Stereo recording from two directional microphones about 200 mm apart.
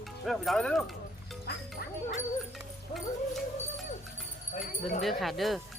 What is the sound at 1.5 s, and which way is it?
Music, 55° left (ahead or behind).